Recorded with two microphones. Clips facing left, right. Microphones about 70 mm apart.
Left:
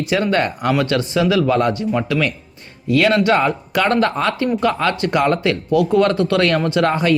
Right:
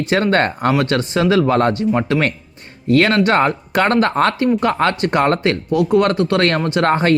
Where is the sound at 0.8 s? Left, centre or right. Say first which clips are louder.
Right 1 dB; right.